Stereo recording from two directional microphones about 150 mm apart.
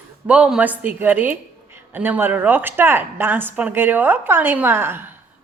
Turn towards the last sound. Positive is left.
turn(degrees=-15)  # may be behind; listen again after turning